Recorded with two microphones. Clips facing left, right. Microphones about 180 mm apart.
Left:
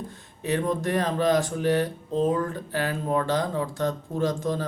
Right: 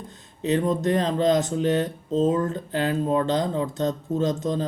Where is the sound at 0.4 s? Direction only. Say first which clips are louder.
Right 3 dB; 20° right (ahead or behind).